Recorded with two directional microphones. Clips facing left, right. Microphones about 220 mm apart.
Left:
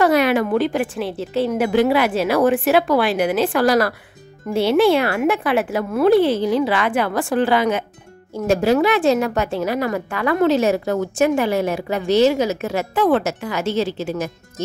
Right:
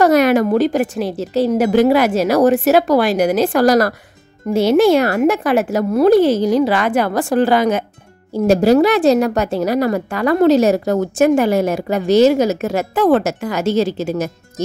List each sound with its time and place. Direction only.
0.0 s a woman's voice: 45° right (ahead or behind)